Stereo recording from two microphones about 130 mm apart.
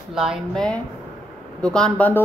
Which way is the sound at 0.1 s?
5° right (ahead or behind).